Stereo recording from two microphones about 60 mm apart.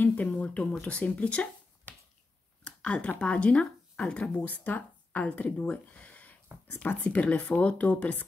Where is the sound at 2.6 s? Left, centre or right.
Centre.